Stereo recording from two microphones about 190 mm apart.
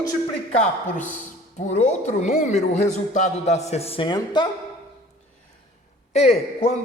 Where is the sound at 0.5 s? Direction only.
40° left (ahead or behind); by 4.4 s 25° left (ahead or behind).